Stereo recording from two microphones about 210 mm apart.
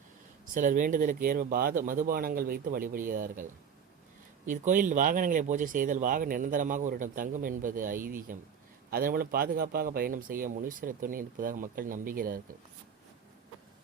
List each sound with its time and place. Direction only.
0.5 s speech: 40° right (ahead or behind)